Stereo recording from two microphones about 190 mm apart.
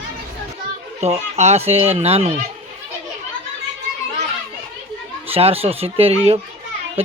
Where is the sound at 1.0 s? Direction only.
35° right (ahead or behind).